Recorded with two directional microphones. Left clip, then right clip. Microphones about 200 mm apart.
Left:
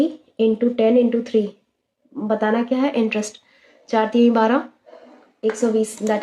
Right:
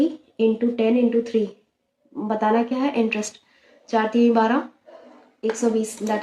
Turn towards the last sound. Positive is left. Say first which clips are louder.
# left 3 dB
turn(degrees=35)  # may be behind; listen again after turning